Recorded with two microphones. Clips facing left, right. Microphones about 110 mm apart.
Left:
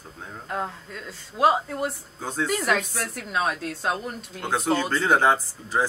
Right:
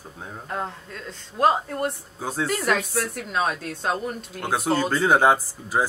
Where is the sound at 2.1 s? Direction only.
5° right (ahead or behind).